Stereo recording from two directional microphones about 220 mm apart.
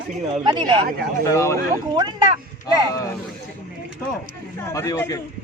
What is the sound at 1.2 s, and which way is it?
Speech, 10° left (ahead or behind).